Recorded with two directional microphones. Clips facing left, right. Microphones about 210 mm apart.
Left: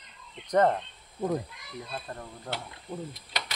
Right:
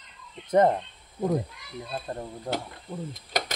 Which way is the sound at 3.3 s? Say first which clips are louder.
Right 8 dB; 45° right (ahead or behind).